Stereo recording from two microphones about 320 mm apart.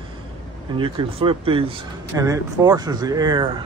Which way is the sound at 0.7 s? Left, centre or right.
Centre.